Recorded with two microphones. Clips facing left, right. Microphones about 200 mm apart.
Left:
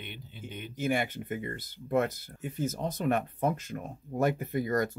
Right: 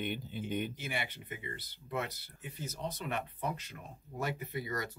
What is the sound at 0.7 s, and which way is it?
Speech, 45° left (ahead or behind).